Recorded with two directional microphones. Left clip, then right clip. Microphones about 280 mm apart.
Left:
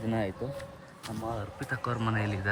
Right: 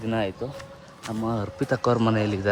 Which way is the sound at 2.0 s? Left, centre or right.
Centre.